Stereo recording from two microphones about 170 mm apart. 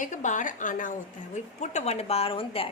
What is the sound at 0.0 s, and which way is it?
A woman's voice, 45° left (ahead or behind).